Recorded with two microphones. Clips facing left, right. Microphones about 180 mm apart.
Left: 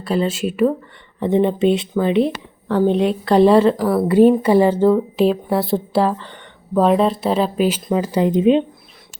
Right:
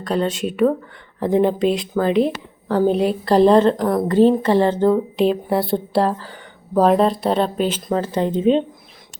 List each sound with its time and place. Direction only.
0.0 s speech: 5° left (ahead or behind)